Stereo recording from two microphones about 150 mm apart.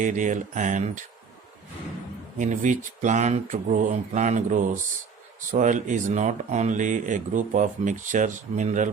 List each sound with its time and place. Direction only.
0.0 s speech: 55° right (ahead or behind)
2.4 s speech: 55° right (ahead or behind)